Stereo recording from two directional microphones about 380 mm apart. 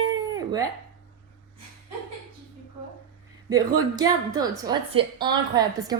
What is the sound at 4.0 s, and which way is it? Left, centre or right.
A woman's voice, centre.